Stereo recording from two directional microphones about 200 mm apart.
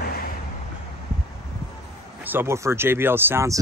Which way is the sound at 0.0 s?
50° left (ahead or behind).